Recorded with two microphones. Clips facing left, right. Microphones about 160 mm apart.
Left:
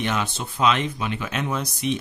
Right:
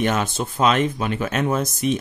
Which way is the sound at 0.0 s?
45° right (ahead or behind).